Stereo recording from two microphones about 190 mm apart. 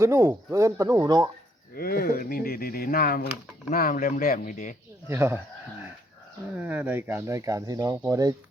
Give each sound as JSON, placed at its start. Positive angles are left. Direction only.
{"t": 0.0, "sound": "speech", "side_deg": -15}
{"t": 1.7, "sound": "speech", "side_deg": 50}
{"t": 5.0, "sound": "speech", "side_deg": -15}
{"t": 6.6, "sound": "speech", "side_deg": -10}